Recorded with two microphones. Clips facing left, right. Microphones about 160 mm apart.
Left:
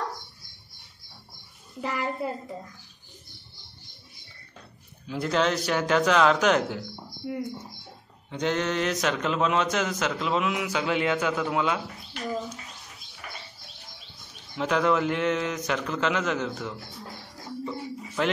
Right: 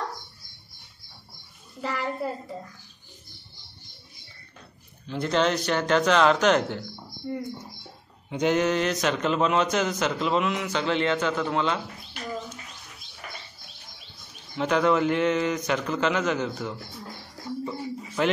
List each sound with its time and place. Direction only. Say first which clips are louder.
1.8 s a child's voice: even; 15° left (ahead or behind)
5.0 s a man's voice: right 1 dB; 5° left (ahead or behind)
8.3 s a man's voice: right 4 dB; 10° right (ahead or behind); by 11.8 s 10° left (ahead or behind)
14.6 s a man's voice: right 2 dB; centre (ahead or behind)
17.6 s a sound: right 1 dB; centre (ahead or behind)